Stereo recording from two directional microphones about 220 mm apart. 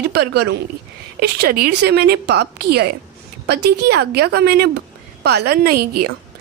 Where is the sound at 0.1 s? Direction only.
45° right (ahead or behind).